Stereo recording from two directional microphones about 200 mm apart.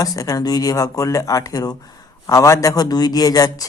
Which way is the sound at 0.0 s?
20° left (ahead or behind).